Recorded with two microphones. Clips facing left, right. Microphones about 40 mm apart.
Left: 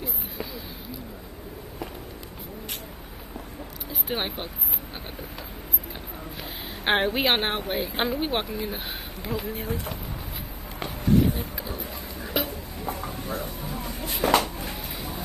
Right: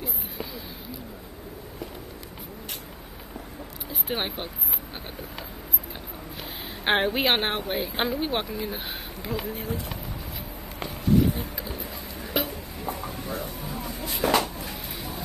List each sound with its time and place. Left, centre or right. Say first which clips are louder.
3.9 s speech: even; centre
6.8 s speech: even; centre
10.8 s a sound: even; left